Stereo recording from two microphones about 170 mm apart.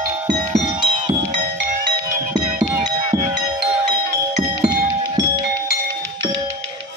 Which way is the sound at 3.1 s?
15° right (ahead or behind).